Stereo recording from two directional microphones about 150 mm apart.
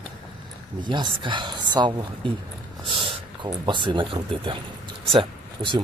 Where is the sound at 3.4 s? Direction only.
30° right (ahead or behind).